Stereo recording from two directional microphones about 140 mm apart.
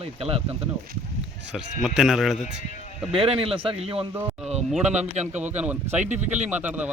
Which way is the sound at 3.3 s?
40° right (ahead or behind).